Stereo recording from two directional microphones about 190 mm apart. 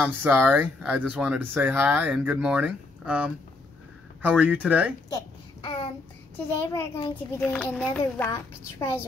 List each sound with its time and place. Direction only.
0.0 s speech: 10° right (ahead or behind)
5.6 s child singing: 30° left (ahead or behind)
6.3 s speech: 10° left (ahead or behind)